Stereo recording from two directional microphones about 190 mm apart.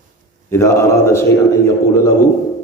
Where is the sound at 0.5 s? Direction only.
15° left (ahead or behind).